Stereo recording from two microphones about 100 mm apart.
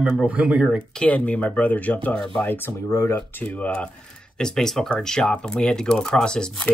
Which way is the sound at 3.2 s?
15° left (ahead or behind).